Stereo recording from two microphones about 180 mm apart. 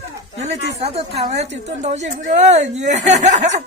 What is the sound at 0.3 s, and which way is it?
Speech, 40° right (ahead or behind).